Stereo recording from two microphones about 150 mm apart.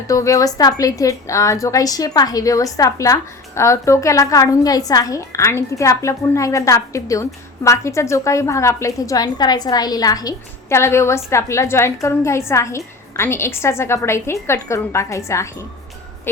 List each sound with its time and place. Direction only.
0.1 s a woman's voice: 20° left (ahead or behind)